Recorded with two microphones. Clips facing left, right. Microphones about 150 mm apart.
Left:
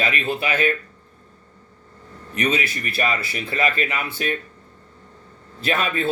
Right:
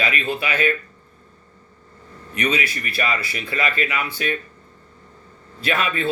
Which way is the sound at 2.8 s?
45° left (ahead or behind).